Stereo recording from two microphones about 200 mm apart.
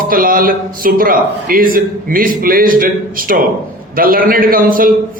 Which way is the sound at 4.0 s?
45° right (ahead or behind).